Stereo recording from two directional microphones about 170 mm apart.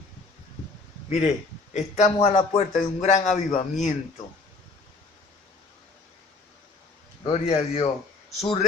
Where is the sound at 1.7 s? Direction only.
40° left (ahead or behind).